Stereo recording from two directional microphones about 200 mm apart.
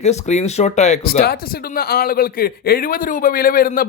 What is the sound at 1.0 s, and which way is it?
A man's voice, 50° left (ahead or behind).